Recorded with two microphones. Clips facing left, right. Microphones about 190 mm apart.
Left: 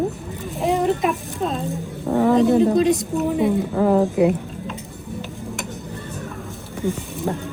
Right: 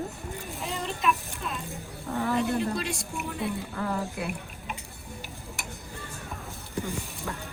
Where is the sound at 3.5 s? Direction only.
80° left.